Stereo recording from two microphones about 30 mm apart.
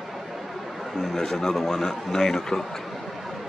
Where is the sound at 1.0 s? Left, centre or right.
Centre.